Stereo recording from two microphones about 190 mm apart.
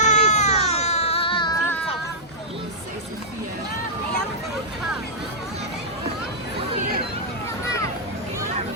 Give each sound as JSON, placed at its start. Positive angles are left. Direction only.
{"t": 0.0, "sound": "baby cry", "side_deg": 35}
{"t": 1.6, "sound": "child singing", "side_deg": 10}